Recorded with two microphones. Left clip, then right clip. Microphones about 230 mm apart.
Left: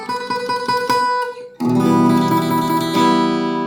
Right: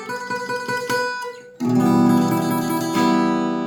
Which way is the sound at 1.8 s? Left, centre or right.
Left.